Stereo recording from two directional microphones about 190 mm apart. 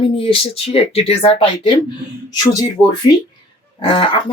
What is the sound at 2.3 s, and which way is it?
Speech, 20° left (ahead or behind).